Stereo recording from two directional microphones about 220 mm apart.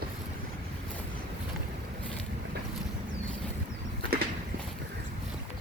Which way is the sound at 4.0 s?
45° right (ahead or behind).